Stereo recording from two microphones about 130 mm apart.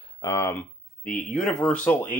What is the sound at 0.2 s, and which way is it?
Speech, 20° left (ahead or behind).